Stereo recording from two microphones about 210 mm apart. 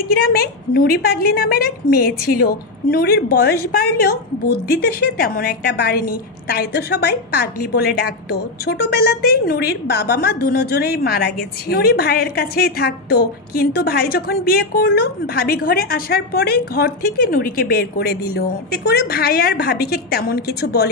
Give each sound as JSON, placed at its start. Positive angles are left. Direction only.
{"t": 0.1, "sound": "a woman's voice", "side_deg": 45}